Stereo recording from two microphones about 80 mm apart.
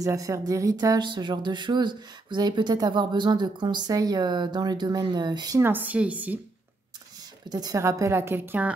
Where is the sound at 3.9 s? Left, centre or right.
Right.